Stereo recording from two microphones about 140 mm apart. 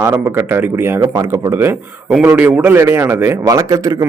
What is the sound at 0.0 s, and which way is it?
A man's voice, 15° right (ahead or behind).